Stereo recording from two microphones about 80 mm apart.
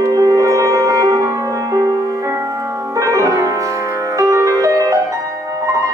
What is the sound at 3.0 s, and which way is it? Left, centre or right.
Music, right.